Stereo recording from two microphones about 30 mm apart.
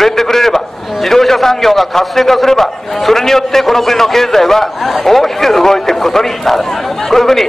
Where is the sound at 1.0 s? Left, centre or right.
Centre.